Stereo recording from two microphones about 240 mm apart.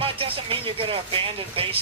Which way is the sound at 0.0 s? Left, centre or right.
Right.